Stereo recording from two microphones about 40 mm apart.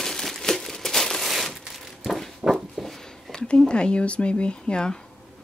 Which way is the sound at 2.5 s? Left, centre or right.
Centre.